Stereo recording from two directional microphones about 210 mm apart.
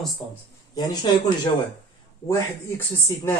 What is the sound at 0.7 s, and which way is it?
Speech, 20° left (ahead or behind).